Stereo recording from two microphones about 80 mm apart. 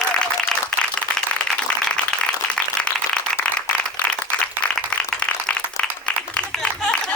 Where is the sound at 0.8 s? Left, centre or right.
Centre.